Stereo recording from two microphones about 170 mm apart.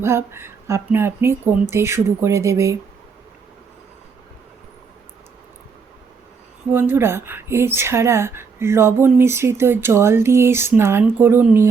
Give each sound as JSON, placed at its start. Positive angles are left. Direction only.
{"t": 0.0, "sound": "speech", "side_deg": -15}
{"t": 6.7, "sound": "speech", "side_deg": -10}